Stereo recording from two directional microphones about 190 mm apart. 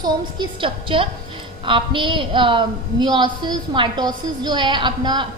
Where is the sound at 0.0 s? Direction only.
20° right (ahead or behind).